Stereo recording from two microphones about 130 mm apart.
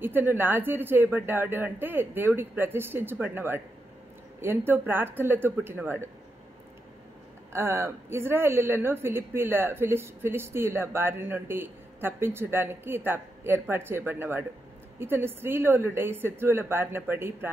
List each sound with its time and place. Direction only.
0.0 s a woman's voice: 15° right (ahead or behind)
7.5 s a woman's voice: 20° right (ahead or behind)